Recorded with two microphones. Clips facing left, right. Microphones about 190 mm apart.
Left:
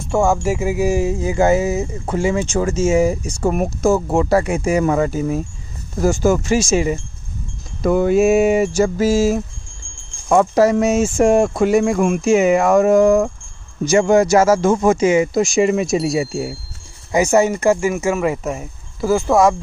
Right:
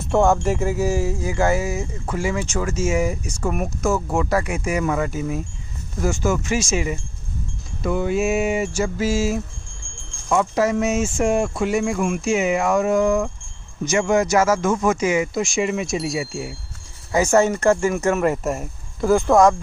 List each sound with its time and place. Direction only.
0.1 s speech: centre (ahead or behind); by 7.0 s 35° left (ahead or behind)
7.8 s speech: 45° left (ahead or behind)
10.2 s speech: 50° left (ahead or behind); by 16.5 s 35° left (ahead or behind)
17.1 s speech: 10° left (ahead or behind)